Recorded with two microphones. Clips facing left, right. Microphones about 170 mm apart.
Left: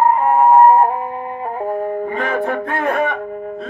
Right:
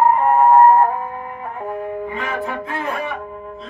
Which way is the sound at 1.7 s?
45° left (ahead or behind).